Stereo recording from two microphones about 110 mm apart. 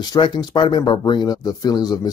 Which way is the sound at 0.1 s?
40° left (ahead or behind).